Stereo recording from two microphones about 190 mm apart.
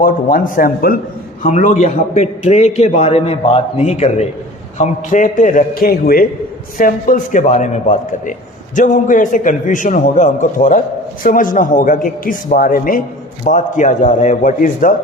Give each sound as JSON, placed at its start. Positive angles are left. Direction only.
{"t": 0.0, "sound": "a man's voice", "side_deg": 45}